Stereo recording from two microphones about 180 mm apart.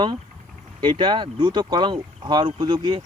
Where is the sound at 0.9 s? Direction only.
25° right (ahead or behind).